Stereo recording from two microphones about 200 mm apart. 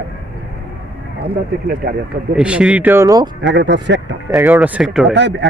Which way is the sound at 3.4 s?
60° right (ahead or behind).